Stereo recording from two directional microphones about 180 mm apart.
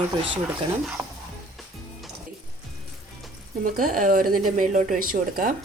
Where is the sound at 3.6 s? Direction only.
50° right (ahead or behind).